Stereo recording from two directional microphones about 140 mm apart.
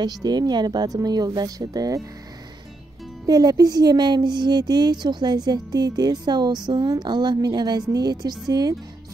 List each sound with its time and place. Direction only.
0.0 s speech: 30° right (ahead or behind)
3.3 s speech: 30° right (ahead or behind)